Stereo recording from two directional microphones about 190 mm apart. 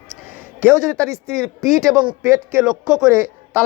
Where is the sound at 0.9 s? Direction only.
5° left (ahead or behind).